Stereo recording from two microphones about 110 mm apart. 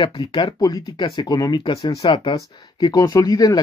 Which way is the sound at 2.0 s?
55° left (ahead or behind).